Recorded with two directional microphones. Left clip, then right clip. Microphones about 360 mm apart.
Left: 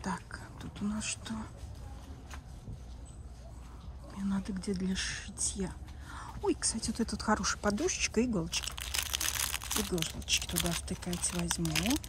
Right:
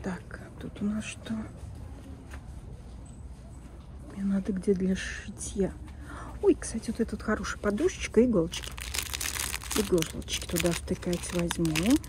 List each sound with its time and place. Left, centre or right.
0.0 s speech: centre
4.2 s speech: centre
5.6 s a sound: centre
7.2 s speech: centre